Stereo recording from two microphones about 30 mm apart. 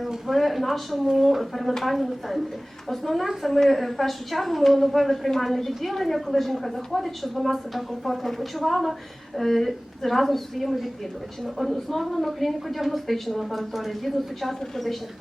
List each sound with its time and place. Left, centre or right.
0.3 s a woman's voice: centre